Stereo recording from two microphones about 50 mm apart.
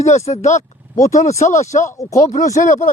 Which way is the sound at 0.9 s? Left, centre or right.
Left.